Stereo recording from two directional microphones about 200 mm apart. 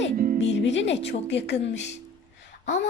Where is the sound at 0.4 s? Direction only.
65° left (ahead or behind).